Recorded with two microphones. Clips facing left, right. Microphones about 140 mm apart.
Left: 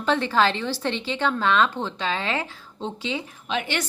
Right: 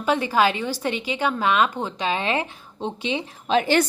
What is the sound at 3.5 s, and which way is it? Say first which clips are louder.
Speech: right 9 dB; 35° right (ahead or behind).